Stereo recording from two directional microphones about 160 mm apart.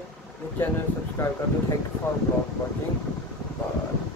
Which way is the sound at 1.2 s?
15° left (ahead or behind).